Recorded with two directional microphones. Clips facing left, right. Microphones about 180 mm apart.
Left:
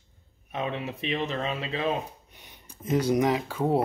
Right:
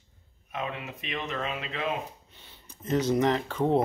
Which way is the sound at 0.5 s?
30° left (ahead or behind).